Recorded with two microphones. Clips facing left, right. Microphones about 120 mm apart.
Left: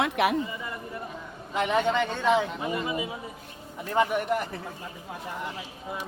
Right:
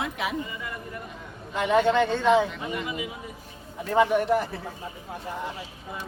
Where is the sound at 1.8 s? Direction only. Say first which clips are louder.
Right 3 dB; 10° left (ahead or behind).